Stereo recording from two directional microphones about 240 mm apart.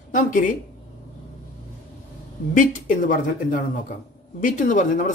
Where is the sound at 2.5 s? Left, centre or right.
Left.